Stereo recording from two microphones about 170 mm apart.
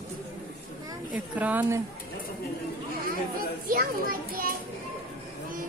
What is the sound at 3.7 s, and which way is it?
Speech, 55° right (ahead or behind).